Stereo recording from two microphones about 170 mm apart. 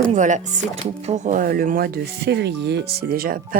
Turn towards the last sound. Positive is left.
turn(degrees=-55)  # may be behind; listen again after turning